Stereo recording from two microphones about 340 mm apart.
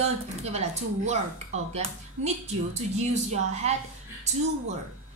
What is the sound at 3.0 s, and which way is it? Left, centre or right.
A woman's voice, centre.